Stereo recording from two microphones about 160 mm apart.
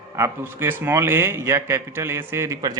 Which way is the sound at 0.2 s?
15° right (ahead or behind).